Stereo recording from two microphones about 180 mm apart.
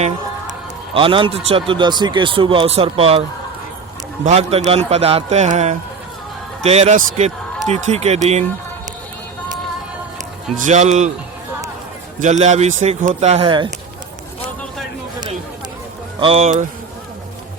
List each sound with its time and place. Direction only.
0.9 s a man's voice: 30° right (ahead or behind)
10.6 s a man's voice: 40° right (ahead or behind)
12.2 s a man's voice: 40° right (ahead or behind)
16.2 s a man's voice: 35° right (ahead or behind)